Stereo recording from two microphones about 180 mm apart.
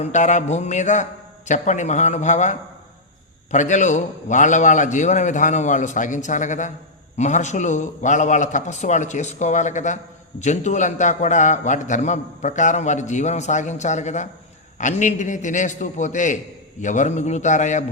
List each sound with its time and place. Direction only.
0.0 s a man's voice: 40° left (ahead or behind)